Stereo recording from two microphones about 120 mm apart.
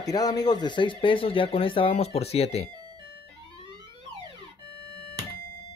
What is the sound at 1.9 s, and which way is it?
Speech, 60° left (ahead or behind).